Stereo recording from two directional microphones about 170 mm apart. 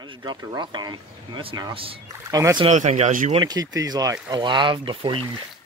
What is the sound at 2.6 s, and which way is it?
Speech, 45° right (ahead or behind).